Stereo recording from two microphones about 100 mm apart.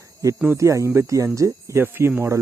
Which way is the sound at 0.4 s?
30° right (ahead or behind).